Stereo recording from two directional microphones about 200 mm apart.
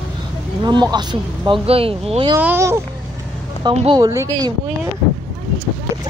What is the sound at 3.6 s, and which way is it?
Speech, 25° right (ahead or behind).